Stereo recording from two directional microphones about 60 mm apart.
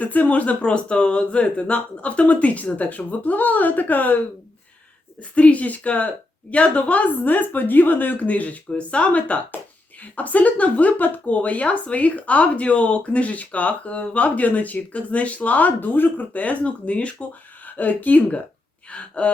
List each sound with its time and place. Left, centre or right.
0.0 s speech: left
5.3 s speech: left